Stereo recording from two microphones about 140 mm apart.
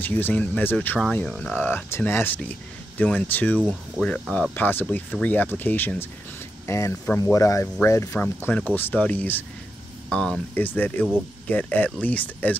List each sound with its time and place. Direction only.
0.0 s speech: 15° left (ahead or behind)